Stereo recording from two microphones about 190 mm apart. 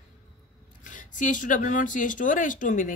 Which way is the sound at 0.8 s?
40° left (ahead or behind).